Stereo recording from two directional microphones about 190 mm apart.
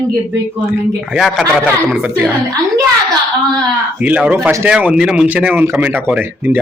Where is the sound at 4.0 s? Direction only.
5° right (ahead or behind).